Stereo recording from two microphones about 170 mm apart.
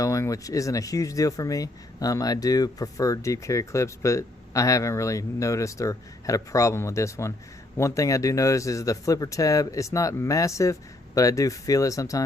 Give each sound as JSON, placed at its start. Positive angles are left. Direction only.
{"t": 0.0, "sound": "speech", "side_deg": 20}